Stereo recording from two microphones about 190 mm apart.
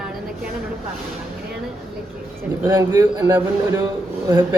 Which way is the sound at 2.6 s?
10° right (ahead or behind).